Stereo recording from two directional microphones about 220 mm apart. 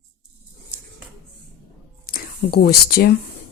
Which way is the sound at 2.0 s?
45° left (ahead or behind).